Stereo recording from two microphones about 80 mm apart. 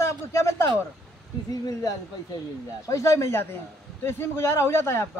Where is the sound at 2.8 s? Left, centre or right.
Left.